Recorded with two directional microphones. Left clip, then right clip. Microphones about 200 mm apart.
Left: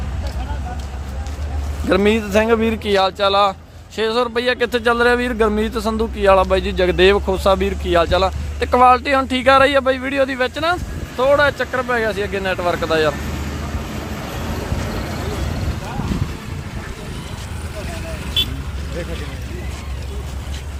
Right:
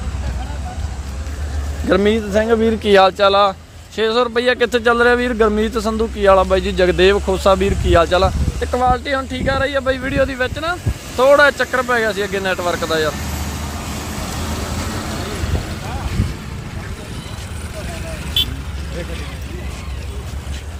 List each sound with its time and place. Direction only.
1.9 s speech: centre (ahead or behind)
2.8 s speech: 25° right (ahead or behind)
8.6 s speech: 10° left (ahead or behind)
9.8 s speech: centre (ahead or behind)
11.2 s speech: 15° right (ahead or behind); by 13.1 s 10° left (ahead or behind)
13.1 s vehicle: 60° right (ahead or behind)